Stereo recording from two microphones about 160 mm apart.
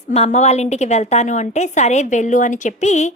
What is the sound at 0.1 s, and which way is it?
A woman's voice, 45° left (ahead or behind).